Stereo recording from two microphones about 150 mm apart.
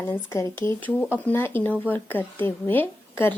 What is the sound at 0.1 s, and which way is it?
Speech, 20° left (ahead or behind).